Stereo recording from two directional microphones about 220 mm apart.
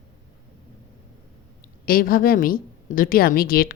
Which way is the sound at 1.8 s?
40° left (ahead or behind).